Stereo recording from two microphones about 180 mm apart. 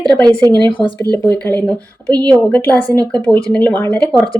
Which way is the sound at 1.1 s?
60° left (ahead or behind).